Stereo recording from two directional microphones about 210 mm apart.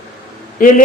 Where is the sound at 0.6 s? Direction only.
40° left (ahead or behind).